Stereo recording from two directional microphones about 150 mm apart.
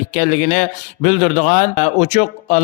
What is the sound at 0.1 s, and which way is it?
Speech, 60° left (ahead or behind).